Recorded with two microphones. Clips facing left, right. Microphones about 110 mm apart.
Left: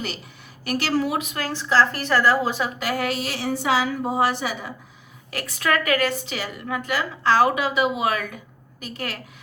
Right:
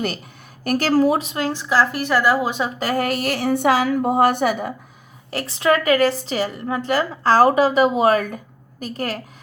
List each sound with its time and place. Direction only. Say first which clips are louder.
0.6 s a woman's voice: right 6 dB; 45° right (ahead or behind); by 2.6 s 15° right (ahead or behind)
2.7 s a woman's voice: right 4 dB; 40° right (ahead or behind)
5.3 s a woman's voice: right 5 dB; 30° right (ahead or behind)